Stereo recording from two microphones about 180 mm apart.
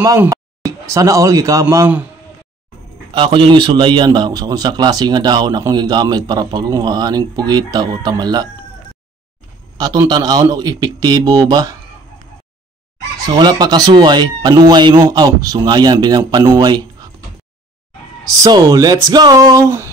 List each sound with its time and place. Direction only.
0.0 s speech: 15° right (ahead or behind)
3.1 s a man's voice: 30° right (ahead or behind)
9.8 s a man's voice: 20° right (ahead or behind)
13.2 s a man's voice: 25° right (ahead or behind)
18.3 s a man's voice: 20° right (ahead or behind)